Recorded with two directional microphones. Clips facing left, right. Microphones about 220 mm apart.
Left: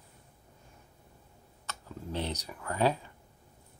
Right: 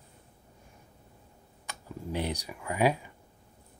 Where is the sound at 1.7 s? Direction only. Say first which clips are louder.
Right 2 dB; 10° right (ahead or behind).